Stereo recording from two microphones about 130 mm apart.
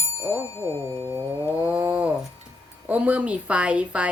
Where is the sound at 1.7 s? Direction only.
10° right (ahead or behind).